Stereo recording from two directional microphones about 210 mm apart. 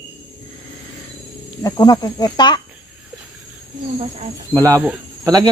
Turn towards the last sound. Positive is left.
turn(degrees=-15)  # may be behind; listen again after turning